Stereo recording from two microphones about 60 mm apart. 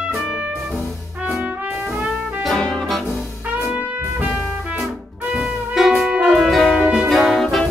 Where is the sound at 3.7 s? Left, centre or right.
Right.